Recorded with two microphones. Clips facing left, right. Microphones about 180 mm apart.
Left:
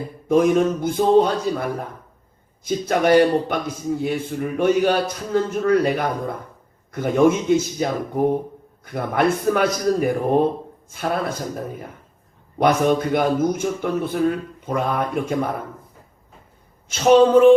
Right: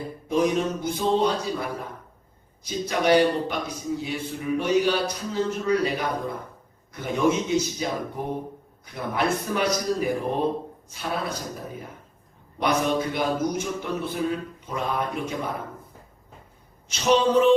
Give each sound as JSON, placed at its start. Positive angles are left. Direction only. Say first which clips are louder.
{"t": 0.3, "sound": "a man's voice", "louder": "left 7 dB", "side_deg": 50}
{"t": 16.9, "sound": "a man's voice", "louder": "left 7 dB", "side_deg": 55}